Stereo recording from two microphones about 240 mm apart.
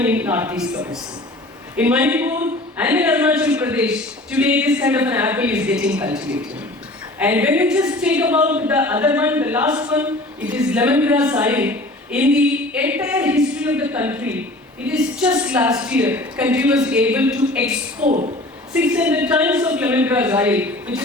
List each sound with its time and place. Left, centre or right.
0.0 s a woman's voice: centre
18.0 s speech: right
18.7 s a woman's voice: centre